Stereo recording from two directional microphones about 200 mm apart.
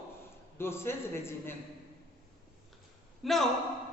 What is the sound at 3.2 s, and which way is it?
Speech, centre (ahead or behind).